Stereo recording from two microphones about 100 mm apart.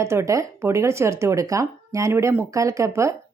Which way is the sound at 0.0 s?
30° right (ahead or behind).